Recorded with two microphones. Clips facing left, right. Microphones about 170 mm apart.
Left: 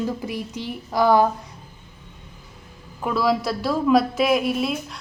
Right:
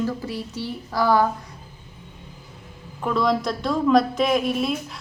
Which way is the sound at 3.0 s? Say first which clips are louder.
Even; 5° left (ahead or behind).